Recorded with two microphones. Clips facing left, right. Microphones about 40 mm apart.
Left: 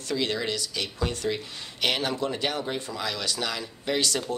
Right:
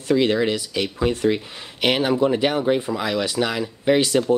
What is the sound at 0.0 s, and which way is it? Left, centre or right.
Speech, right.